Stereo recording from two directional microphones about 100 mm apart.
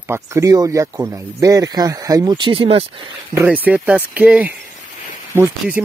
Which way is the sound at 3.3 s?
15° right (ahead or behind).